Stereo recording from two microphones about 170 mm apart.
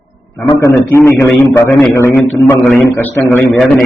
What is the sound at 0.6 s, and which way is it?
A man's voice, 15° left (ahead or behind).